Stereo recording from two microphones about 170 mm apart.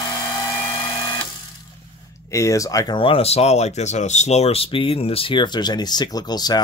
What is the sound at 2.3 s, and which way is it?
Speech, 20° left (ahead or behind).